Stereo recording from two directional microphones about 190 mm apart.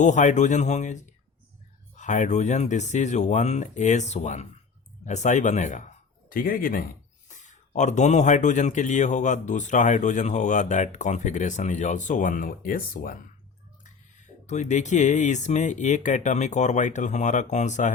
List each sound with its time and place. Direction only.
0.0 s speech: 40° left (ahead or behind)